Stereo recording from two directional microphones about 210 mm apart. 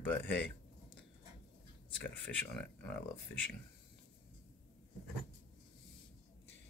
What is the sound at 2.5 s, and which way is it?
Speech, 5° left (ahead or behind).